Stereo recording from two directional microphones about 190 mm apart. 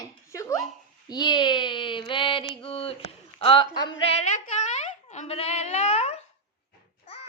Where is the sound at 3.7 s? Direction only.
20° left (ahead or behind).